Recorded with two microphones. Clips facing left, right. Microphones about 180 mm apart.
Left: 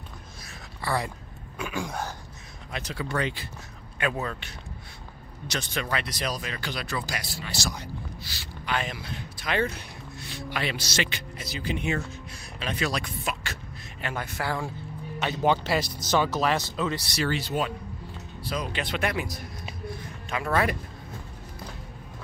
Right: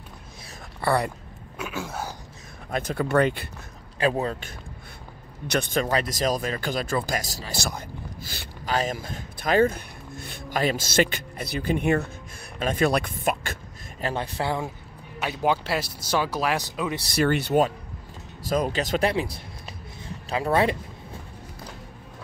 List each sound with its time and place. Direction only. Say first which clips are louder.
0.7 s speech: right 6 dB; 60° right (ahead or behind)
1.6 s speech: even; 5° right (ahead or behind)
2.7 s speech: right 8 dB; 50° right (ahead or behind)
4.0 s speech: right 5 dB; 30° right (ahead or behind)
5.5 s speech: right 7 dB; 50° right (ahead or behind)
7.5 s speech: right 2 dB; 55° right (ahead or behind)
14.0 s speech: right 4 dB; 35° right (ahead or behind)
15.1 s speech: even; 5° right (ahead or behind)
17.1 s speech: right 6 dB; 55° right (ahead or behind)
18.4 s speech: right 7 dB; 45° right (ahead or behind); by 20.7 s 30° right (ahead or behind)